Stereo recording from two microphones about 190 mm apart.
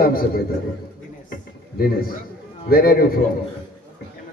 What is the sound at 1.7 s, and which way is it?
A man's voice, 50° left (ahead or behind).